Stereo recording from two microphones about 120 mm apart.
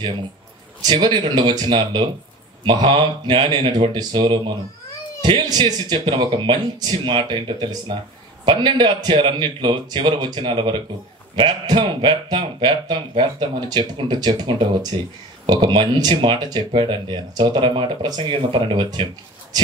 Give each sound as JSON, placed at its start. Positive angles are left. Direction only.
{"t": 0.8, "sound": "speech", "side_deg": -40}